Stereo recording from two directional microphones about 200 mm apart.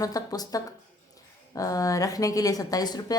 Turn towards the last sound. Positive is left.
turn(degrees=20)  # may be behind; listen again after turning